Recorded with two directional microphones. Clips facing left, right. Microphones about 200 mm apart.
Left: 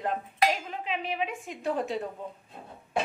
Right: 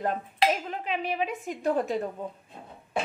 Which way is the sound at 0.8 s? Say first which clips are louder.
Right 2 dB; 40° right (ahead or behind).